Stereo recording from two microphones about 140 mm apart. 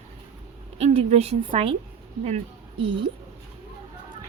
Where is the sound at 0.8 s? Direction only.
50° right (ahead or behind).